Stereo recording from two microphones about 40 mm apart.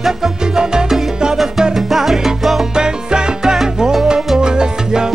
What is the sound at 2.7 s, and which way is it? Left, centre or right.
Salsa music, centre.